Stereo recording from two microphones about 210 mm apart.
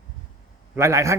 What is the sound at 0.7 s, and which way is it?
Speech, 15° right (ahead or behind).